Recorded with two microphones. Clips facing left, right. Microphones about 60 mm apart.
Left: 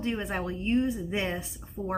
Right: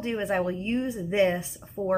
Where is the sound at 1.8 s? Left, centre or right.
Right.